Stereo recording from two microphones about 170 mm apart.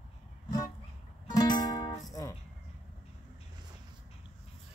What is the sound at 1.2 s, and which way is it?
Music, 25° left (ahead or behind).